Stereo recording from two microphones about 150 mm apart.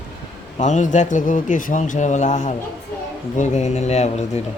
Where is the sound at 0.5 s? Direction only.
55° left (ahead or behind).